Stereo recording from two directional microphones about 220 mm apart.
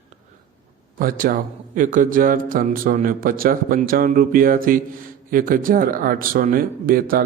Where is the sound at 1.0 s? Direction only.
40° right (ahead or behind).